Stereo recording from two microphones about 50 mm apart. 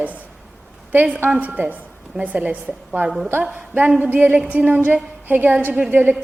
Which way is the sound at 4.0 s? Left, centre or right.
Right.